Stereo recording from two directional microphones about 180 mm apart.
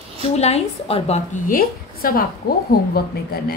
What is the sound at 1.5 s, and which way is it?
A woman's voice, 55° left (ahead or behind).